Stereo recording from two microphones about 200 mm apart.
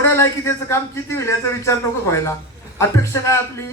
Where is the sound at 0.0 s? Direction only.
15° left (ahead or behind).